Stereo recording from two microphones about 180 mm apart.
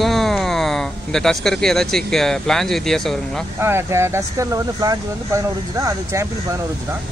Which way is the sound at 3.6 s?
15° right (ahead or behind).